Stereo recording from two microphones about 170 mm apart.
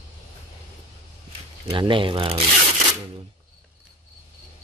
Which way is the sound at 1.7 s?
30° right (ahead or behind).